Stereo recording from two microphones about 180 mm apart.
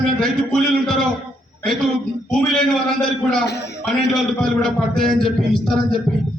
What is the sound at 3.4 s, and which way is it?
Speech, 65° left (ahead or behind).